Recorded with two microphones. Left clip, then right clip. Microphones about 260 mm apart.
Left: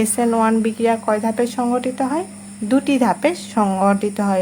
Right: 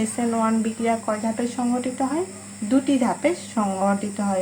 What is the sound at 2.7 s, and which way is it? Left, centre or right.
Speech, left.